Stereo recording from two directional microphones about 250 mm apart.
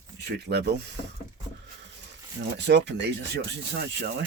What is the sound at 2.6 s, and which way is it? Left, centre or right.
Speech, right.